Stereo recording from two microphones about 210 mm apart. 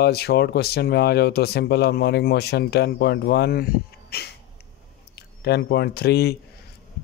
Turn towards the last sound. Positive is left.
turn(degrees=50)  # may be behind; listen again after turning